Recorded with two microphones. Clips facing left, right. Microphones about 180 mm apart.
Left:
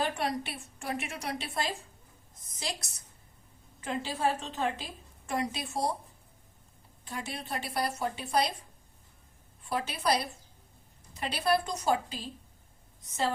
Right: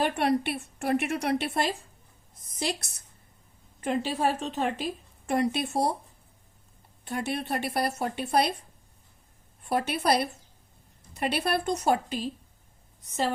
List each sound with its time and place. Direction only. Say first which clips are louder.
0.0 s a woman's voice: right 6 dB; 60° right (ahead or behind)
3.8 s a woman's voice: right 6 dB; 65° right (ahead or behind)
7.0 s a woman's voice: right 8 dB; 60° right (ahead or behind)
9.6 s a woman's voice: right 5 dB; 60° right (ahead or behind)